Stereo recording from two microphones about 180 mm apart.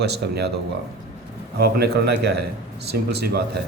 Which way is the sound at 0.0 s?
65° right (ahead or behind).